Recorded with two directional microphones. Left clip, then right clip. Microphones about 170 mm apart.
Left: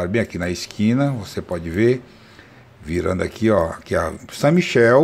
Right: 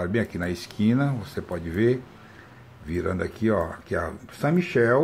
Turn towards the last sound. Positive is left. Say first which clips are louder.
# left 7 dB
turn(degrees=35)  # may be behind; listen again after turning